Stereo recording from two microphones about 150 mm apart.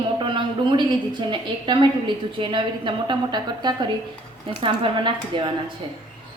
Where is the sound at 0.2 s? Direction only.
30° right (ahead or behind).